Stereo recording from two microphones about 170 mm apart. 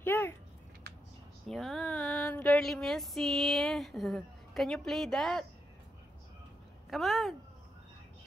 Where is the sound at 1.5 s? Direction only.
Centre (ahead or behind).